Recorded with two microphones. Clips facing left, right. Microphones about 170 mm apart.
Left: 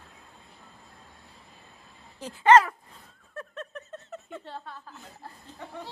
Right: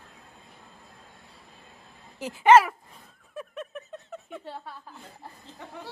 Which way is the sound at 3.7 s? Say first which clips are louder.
Right 1 dB; centre (ahead or behind).